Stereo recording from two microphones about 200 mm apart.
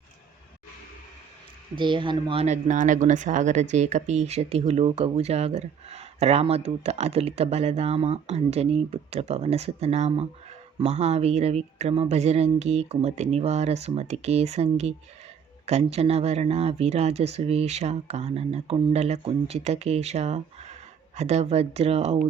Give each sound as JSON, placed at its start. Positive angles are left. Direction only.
{"t": 1.7, "sound": "speech", "side_deg": -25}